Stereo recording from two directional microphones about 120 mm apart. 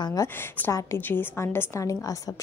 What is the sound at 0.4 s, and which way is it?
A woman's voice, 20° left (ahead or behind).